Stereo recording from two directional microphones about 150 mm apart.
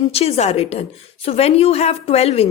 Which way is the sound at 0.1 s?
40° left (ahead or behind).